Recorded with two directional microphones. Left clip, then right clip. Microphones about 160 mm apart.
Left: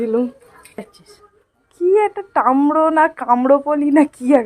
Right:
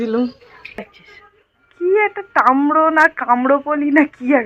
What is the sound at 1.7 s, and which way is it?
Speech, 25° left (ahead or behind).